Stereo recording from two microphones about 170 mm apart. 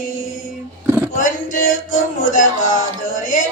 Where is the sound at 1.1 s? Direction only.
50° left (ahead or behind).